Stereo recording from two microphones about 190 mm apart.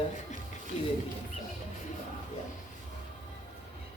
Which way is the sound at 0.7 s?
35° left (ahead or behind).